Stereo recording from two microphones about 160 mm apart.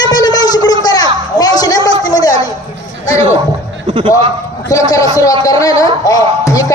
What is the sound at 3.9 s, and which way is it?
Speech, 35° right (ahead or behind).